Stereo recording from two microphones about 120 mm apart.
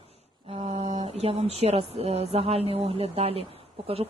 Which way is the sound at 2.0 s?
55° right (ahead or behind).